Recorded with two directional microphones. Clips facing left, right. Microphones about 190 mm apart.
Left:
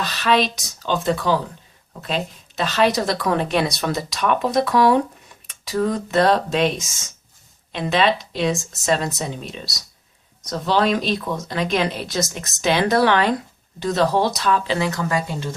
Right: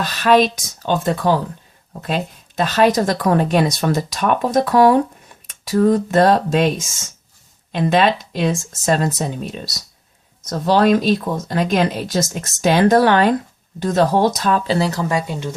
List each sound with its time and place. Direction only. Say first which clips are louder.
0.0 s speech: right 5 dB; 45° right (ahead or behind)